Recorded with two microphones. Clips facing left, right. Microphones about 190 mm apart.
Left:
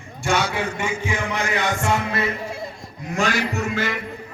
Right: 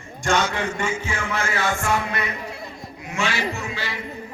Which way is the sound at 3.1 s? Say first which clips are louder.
Left 3 dB; 45° left (ahead or behind).